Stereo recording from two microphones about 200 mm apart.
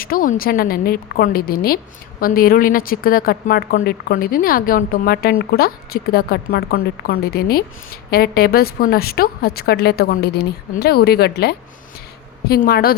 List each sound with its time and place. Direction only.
0.0 s a woman's voice: 45° left (ahead or behind)